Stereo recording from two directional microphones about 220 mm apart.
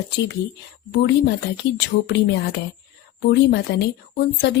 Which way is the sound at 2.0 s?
50° left (ahead or behind).